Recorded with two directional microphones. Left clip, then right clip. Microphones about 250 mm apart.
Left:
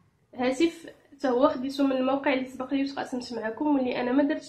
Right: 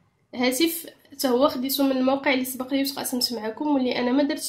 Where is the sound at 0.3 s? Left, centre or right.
Right.